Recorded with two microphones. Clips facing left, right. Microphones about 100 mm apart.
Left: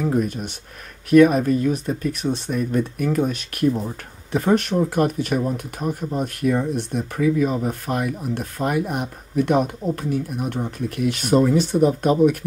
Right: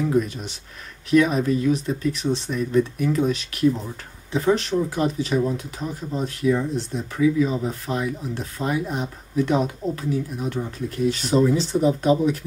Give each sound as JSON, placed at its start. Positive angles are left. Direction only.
{"t": 0.0, "sound": "speech", "side_deg": 50}